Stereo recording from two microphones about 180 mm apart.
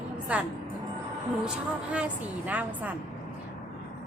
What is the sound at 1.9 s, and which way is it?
A woman's voice, 10° right (ahead or behind).